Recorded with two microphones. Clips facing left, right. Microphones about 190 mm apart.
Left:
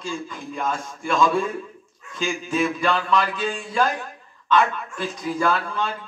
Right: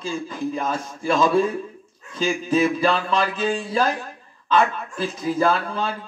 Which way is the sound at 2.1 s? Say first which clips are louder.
Right 4 dB; 30° right (ahead or behind).